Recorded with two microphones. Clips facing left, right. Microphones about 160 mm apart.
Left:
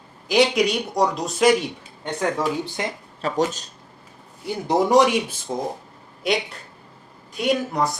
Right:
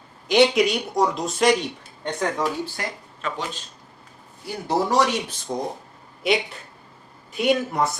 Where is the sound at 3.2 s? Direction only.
40° left (ahead or behind).